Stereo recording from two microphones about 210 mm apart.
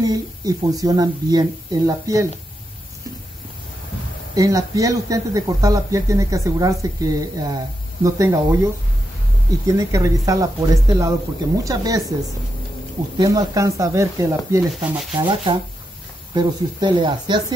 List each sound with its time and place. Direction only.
0.0 s speech: 15° right (ahead or behind)
4.4 s speech: 15° right (ahead or behind)
9.7 s speech: 15° right (ahead or behind)
13.2 s speech: 15° right (ahead or behind)
14.7 s sanding: 5° right (ahead or behind)
15.2 s speech: 25° right (ahead or behind)